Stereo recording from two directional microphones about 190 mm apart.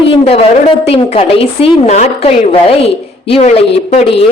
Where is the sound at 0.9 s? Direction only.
30° left (ahead or behind).